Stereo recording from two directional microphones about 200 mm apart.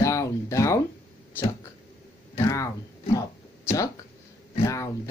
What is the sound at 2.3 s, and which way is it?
Speech, 15° left (ahead or behind).